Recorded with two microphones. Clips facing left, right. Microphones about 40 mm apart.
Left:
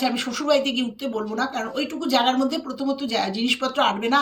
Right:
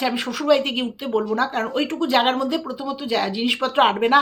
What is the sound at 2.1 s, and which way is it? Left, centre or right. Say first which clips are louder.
Speech: even; right.